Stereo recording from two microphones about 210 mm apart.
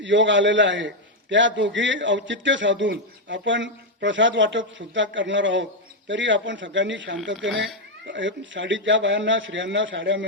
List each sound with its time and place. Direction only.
0.0 s a man's voice: 60° right (ahead or behind)